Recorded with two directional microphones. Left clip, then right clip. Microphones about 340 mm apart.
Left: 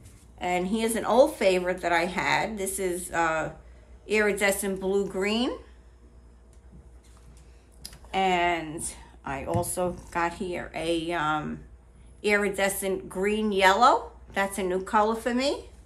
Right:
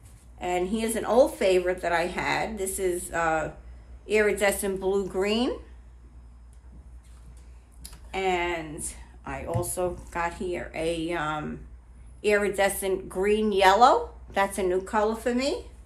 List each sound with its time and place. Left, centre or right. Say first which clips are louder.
0.4 s speech: left 1 dB; centre
7.8 s speech: left 3 dB; centre